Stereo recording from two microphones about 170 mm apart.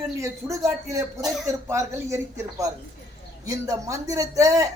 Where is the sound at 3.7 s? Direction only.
20° right (ahead or behind).